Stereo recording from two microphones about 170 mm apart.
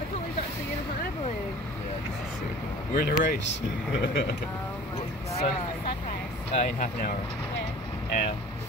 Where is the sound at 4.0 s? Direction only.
90° left.